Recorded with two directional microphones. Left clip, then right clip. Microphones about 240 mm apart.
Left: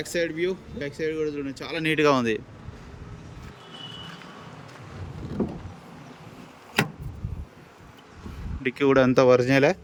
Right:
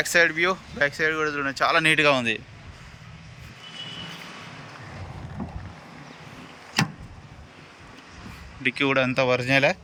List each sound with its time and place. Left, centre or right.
0.0 s speech: centre
8.6 s speech: centre